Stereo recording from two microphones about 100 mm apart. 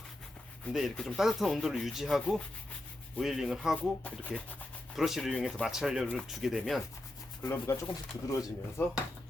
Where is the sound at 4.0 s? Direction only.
15° left (ahead or behind).